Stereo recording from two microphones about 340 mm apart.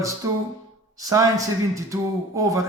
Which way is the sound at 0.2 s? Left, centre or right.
Centre.